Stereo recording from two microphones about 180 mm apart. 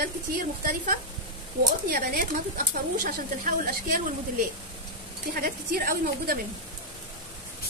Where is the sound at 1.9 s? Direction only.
55° right (ahead or behind).